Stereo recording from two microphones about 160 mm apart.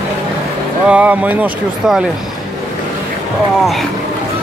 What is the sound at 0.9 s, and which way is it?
Speech, 10° right (ahead or behind).